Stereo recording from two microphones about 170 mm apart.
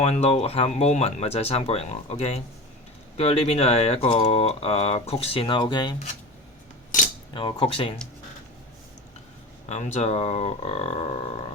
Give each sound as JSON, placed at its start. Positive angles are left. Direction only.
{"t": 0.0, "sound": "speech", "side_deg": 40}
{"t": 7.3, "sound": "speech", "side_deg": 30}
{"t": 9.6, "sound": "speech", "side_deg": 40}